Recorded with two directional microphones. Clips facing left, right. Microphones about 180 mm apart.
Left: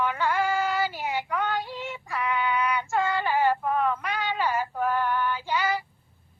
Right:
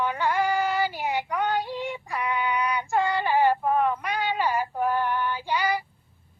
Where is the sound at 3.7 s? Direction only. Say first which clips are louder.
Right 2 dB; 15° right (ahead or behind).